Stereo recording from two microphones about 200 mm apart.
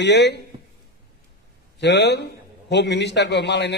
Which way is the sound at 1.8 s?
60° left (ahead or behind).